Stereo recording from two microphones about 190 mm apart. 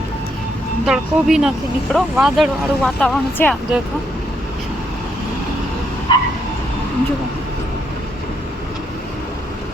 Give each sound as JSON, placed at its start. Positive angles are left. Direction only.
{"t": 0.9, "sound": "speech", "side_deg": -5}
{"t": 6.1, "sound": "vehicle", "side_deg": 25}